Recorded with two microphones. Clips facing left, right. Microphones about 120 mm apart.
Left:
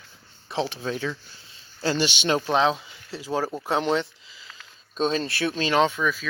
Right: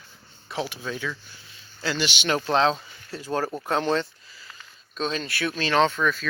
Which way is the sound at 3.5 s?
20° left (ahead or behind).